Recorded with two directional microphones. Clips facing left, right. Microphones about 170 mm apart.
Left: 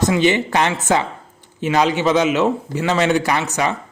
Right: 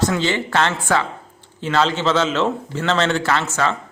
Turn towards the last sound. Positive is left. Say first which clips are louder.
# left 1 dB
turn(degrees=15)  # may be behind; listen again after turning